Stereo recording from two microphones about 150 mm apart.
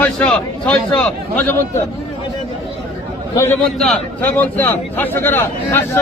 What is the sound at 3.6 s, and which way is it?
A man's voice, 5° left (ahead or behind).